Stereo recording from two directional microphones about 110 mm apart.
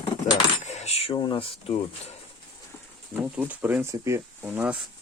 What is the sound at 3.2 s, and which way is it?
Speech, 10° right (ahead or behind).